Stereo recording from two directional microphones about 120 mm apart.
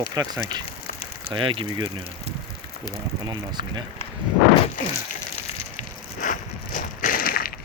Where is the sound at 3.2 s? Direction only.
35° right (ahead or behind).